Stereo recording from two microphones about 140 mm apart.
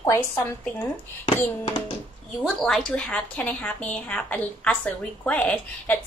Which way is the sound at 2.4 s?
Centre (ahead or behind).